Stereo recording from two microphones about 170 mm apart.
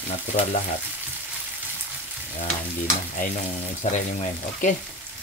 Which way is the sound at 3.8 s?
40° left (ahead or behind).